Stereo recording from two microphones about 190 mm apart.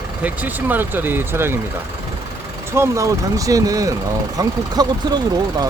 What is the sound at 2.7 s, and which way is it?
Speech, 15° right (ahead or behind).